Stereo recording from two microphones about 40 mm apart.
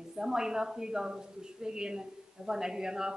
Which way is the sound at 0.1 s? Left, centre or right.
Centre.